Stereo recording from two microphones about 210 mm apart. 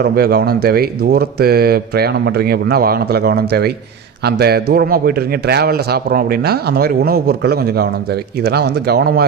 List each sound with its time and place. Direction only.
0.0 s speech: 50° right (ahead or behind)